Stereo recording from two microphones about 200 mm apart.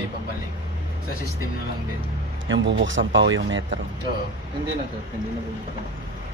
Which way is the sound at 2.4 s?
65° right (ahead or behind).